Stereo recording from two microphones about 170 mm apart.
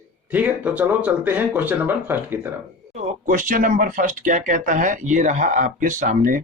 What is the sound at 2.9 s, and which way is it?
Speech, 45° right (ahead or behind).